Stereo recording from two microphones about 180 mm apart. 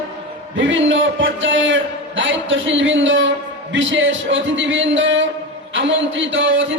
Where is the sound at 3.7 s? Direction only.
90° right.